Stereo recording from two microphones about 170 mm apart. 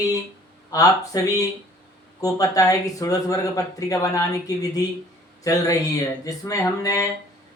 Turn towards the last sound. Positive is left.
turn(degrees=20)  # may be behind; listen again after turning